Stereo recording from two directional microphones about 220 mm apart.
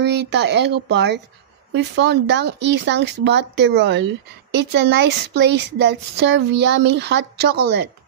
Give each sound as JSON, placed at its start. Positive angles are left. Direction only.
{"t": 0.0, "sound": "a woman's voice", "side_deg": -50}